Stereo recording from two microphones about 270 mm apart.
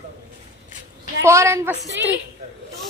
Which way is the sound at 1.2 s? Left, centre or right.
Centre.